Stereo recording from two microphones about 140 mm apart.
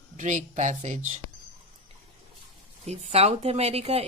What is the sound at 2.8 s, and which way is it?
A woman's voice, 50° right (ahead or behind).